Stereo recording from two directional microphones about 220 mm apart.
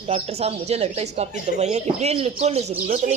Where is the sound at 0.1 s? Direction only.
30° right (ahead or behind).